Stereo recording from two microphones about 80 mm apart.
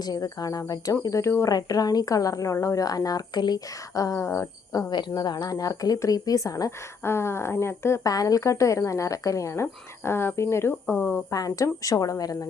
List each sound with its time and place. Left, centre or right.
0.0 s speech: left
1.0 s a woman's voice: left
1.5 s speech: left
4.9 s speech: left
8.0 s a woman's voice: left
11.3 s speech: left